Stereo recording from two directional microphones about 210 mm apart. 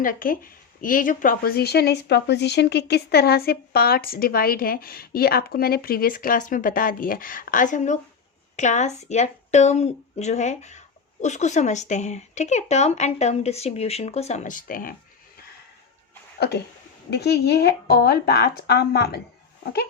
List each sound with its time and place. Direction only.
0.0 s a woman's voice: 40° left (ahead or behind)
16.4 s speech: 50° left (ahead or behind)